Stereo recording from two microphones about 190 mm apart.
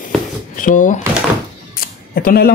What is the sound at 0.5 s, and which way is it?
Speech, 45° left (ahead or behind).